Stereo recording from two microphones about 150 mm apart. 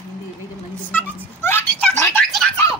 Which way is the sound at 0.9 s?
15° left (ahead or behind).